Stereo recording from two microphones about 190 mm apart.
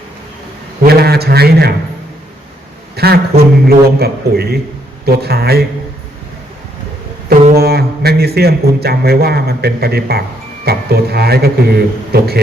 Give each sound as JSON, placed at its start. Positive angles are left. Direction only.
{"t": 0.9, "sound": "a man's voice", "side_deg": -55}
{"t": 2.9, "sound": "speech", "side_deg": -55}
{"t": 7.5, "sound": "speech", "side_deg": -55}